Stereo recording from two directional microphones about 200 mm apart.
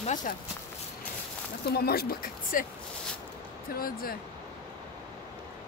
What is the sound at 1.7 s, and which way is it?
Speech, 50° left (ahead or behind).